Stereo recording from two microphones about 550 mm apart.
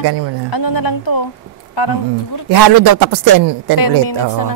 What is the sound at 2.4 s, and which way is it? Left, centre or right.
Speech, right.